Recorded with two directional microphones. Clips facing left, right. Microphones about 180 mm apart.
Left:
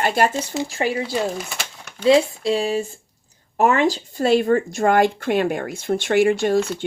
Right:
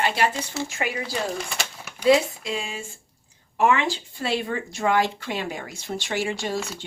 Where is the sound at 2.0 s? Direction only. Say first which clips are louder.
Left 4 dB; 35° left (ahead or behind); by 6.8 s 55° left (ahead or behind).